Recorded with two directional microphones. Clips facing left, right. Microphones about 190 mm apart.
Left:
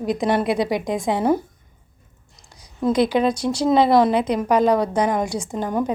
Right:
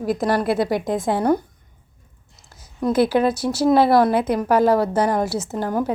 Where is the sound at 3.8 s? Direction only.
20° left (ahead or behind).